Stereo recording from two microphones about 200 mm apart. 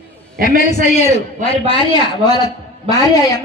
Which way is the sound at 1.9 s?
20° left (ahead or behind).